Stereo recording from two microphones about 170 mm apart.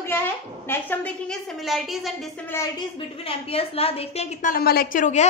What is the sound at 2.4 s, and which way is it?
A woman's voice, 15° left (ahead or behind).